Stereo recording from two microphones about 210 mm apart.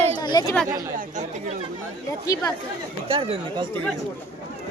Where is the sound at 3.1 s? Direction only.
25° right (ahead or behind).